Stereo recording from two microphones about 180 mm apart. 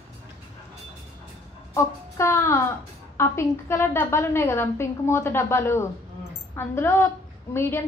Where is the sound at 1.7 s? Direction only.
15° left (ahead or behind).